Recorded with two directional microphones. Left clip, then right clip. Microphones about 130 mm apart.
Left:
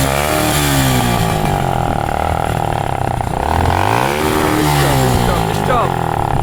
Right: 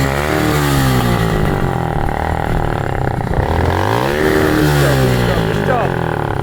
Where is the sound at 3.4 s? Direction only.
5° right (ahead or behind).